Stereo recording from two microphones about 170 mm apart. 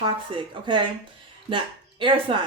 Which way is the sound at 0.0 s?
30° right (ahead or behind).